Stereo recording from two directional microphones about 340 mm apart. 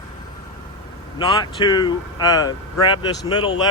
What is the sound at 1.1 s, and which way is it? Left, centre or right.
Speech, centre.